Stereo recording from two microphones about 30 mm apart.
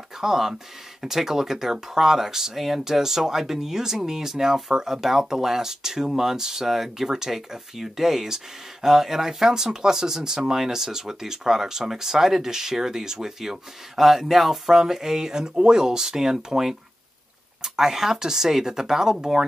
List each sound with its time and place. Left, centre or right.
0.2 s speech: centre
17.7 s speech: centre